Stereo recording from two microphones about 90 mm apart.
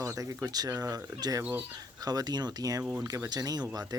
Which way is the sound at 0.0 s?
35° right (ahead or behind).